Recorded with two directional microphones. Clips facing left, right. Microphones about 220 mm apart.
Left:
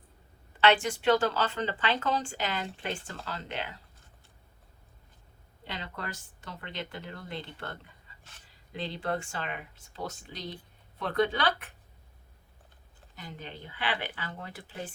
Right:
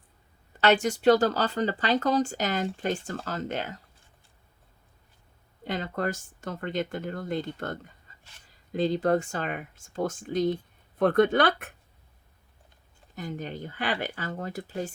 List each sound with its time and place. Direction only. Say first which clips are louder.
0.6 s speech: right 4 dB; 40° right (ahead or behind)
5.6 s speech: right 10 dB; 45° right (ahead or behind)
13.1 s speech: right 9 dB; 45° right (ahead or behind)